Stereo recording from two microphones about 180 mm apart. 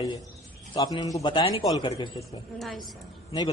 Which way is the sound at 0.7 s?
20° left (ahead or behind).